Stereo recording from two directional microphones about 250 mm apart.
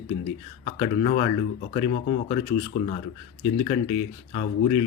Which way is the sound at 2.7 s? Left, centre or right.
Left.